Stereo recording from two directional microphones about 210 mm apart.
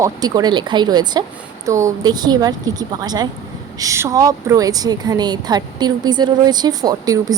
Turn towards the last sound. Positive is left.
turn(degrees=-20)  # may be behind; listen again after turning